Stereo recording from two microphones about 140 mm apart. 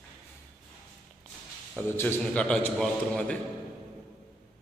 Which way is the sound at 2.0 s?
10° left (ahead or behind).